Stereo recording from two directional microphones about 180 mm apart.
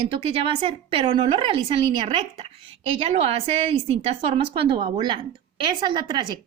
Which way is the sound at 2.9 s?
30° right (ahead or behind).